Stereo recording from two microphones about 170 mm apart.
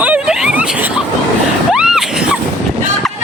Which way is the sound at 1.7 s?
5° right (ahead or behind).